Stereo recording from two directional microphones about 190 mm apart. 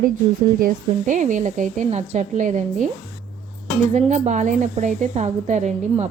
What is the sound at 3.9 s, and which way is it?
A woman's voice, 40° right (ahead or behind).